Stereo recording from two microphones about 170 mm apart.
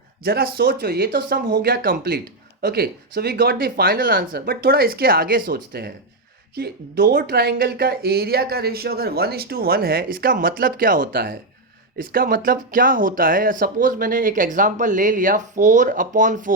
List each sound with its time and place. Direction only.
0.2 s speech: 65° right (ahead or behind)